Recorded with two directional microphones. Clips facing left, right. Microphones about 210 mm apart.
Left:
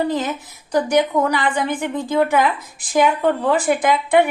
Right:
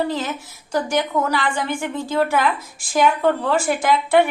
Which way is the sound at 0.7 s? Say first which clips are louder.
Left 4 dB; 15° left (ahead or behind).